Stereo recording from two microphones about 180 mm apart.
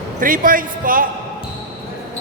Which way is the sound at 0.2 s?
50° right (ahead or behind).